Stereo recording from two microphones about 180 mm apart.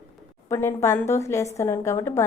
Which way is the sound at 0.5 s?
15° left (ahead or behind).